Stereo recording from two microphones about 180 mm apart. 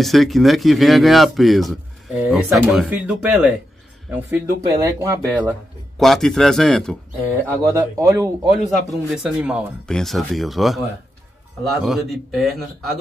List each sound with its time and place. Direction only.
0.0 s speech: centre (ahead or behind)
4.7 s speech: 20° right (ahead or behind)
5.9 s speech: centre (ahead or behind)
7.2 s speech: 15° right (ahead or behind)
8.5 s speech: centre (ahead or behind)
11.8 s speech: centre (ahead or behind)